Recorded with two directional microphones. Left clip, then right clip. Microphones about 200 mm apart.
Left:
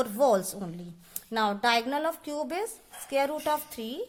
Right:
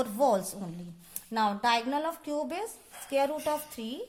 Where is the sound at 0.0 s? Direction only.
25° left (ahead or behind).